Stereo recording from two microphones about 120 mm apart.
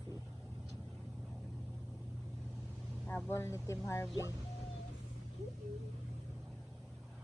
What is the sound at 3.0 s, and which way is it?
Speech, 20° left (ahead or behind).